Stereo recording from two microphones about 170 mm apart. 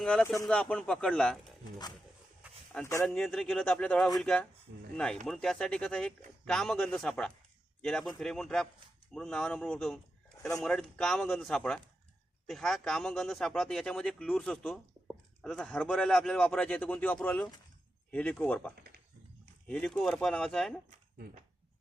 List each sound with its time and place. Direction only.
0.0 s a man's voice: 5° left (ahead or behind)
2.4 s a sound: 5° right (ahead or behind)
2.8 s speech: 15° left (ahead or behind)
3.2 s a man's voice: centre (ahead or behind)
4.7 s speech: 60° right (ahead or behind)
5.2 s a man's voice: 5° left (ahead or behind)